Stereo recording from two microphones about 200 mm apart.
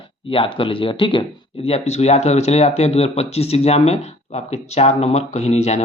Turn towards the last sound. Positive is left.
turn(degrees=35)  # may be behind; listen again after turning